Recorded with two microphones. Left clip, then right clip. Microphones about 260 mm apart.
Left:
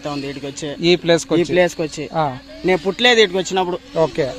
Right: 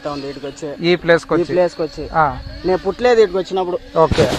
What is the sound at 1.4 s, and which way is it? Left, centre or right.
Speech, left.